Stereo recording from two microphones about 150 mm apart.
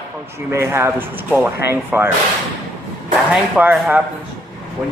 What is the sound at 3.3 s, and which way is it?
Speech, 10° right (ahead or behind).